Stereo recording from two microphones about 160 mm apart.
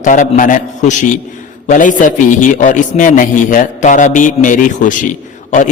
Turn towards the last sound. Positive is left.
turn(degrees=50)  # may be behind; listen again after turning